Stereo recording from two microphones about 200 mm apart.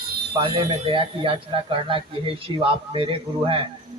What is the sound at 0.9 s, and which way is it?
Speech, 25° right (ahead or behind).